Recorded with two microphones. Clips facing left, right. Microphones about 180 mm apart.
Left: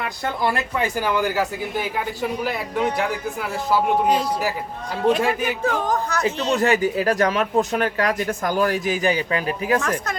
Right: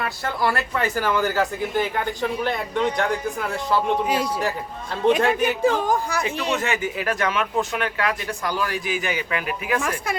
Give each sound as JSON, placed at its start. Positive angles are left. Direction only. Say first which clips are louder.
{"t": 0.0, "sound": "a man's voice", "louder": "even", "side_deg": 15}
{"t": 5.4, "sound": "speech", "louder": "right 3 dB", "side_deg": -10}
{"t": 6.5, "sound": "speech", "louder": "left 8 dB", "side_deg": 35}